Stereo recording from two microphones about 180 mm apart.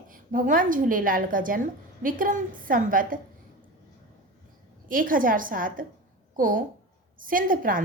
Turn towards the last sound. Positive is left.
turn(degrees=-50)  # may be behind; listen again after turning